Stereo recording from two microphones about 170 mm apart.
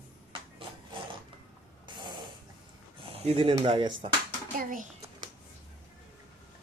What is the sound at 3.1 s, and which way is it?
Speech, 35° right (ahead or behind).